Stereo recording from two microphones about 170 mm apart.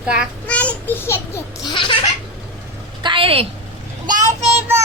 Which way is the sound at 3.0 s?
30° right (ahead or behind).